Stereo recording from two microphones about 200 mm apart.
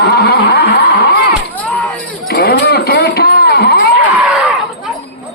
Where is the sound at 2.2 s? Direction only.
50° left (ahead or behind).